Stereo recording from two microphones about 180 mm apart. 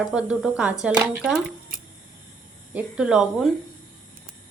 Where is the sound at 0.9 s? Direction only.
20° right (ahead or behind).